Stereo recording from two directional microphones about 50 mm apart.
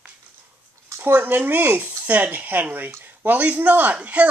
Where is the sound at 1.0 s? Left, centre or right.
Right.